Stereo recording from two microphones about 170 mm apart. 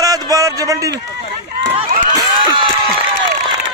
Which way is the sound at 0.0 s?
20° right (ahead or behind).